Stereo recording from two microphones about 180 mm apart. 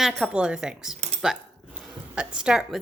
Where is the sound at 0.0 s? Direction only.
Centre (ahead or behind).